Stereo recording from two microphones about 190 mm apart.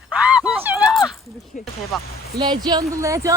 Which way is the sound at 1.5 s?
45° left (ahead or behind).